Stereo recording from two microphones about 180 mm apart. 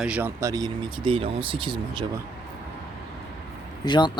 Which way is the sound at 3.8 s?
25° left (ahead or behind).